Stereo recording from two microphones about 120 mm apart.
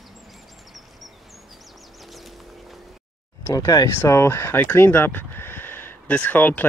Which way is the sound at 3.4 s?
30° left (ahead or behind).